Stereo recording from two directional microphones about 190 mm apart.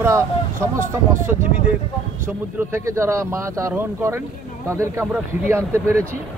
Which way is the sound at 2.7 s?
15° right (ahead or behind).